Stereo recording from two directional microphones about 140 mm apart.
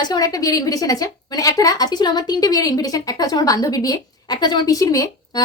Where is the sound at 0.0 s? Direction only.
30° left (ahead or behind).